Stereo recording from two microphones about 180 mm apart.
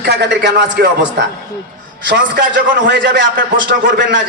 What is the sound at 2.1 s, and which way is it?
A man's voice, 80° right.